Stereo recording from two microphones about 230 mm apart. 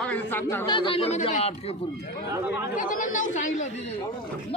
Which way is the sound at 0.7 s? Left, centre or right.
Left.